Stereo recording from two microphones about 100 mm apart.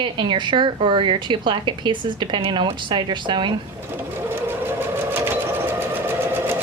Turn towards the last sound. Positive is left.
turn(degrees=-20)  # may be behind; listen again after turning